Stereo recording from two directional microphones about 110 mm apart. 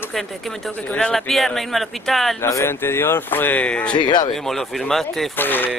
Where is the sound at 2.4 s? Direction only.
25° left (ahead or behind).